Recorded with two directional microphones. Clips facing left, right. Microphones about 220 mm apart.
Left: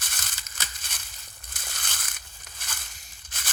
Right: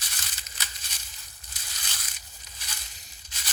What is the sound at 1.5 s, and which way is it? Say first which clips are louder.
Crushing: left 4 dB; 50° left (ahead or behind).